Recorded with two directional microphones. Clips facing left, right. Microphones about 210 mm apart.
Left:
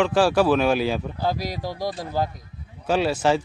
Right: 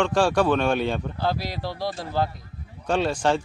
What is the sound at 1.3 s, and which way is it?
Speech, 45° left (ahead or behind).